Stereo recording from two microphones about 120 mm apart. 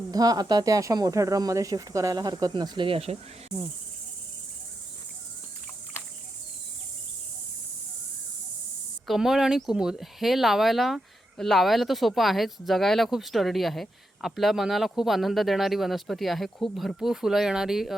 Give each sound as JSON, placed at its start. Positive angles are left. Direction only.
{"t": 0.1, "sound": "speech", "side_deg": -30}
{"t": 9.0, "sound": "speech", "side_deg": 0}